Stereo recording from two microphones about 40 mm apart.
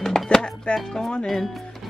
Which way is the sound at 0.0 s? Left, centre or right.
Centre.